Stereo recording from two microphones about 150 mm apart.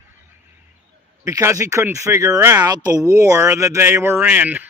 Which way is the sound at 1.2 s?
20° right (ahead or behind).